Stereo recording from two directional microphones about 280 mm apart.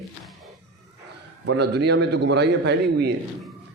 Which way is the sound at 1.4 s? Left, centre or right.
Right.